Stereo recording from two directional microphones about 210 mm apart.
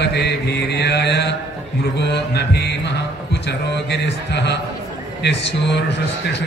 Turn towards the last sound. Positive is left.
turn(degrees=55)  # may be behind; listen again after turning